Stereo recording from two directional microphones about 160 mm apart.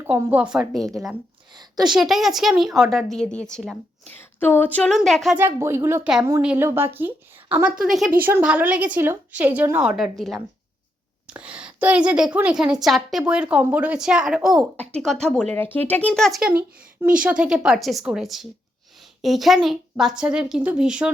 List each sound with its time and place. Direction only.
0.0 s a woman's voice: 10° right (ahead or behind)
1.5 s a woman's voice: 25° right (ahead or behind)
1.9 s a woman's voice: centre (ahead or behind)
5.4 s a woman's voice: 15° right (ahead or behind)
8.2 s a woman's voice: 15° right (ahead or behind)
17.0 s a woman's voice: 10° right (ahead or behind)